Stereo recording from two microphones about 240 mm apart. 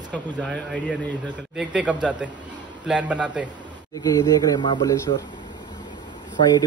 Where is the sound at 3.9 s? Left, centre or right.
Centre.